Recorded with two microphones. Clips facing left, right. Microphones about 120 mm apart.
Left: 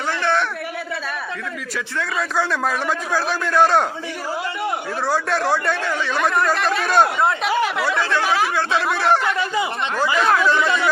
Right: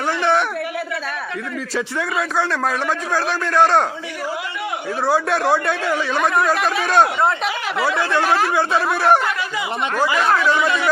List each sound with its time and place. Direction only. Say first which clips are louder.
0.2 s a sound: right 3 dB; 15° right (ahead or behind)
2.3 s speech: left 1 dB; 5° left (ahead or behind)
5.1 s speech: right 2 dB; centre (ahead or behind)
7.9 s speech: right 2 dB; 20° right (ahead or behind)